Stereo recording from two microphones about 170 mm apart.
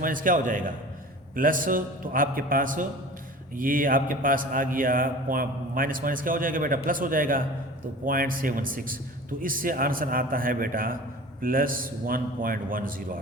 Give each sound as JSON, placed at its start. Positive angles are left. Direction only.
{"t": 0.0, "sound": "a man's voice", "side_deg": -55}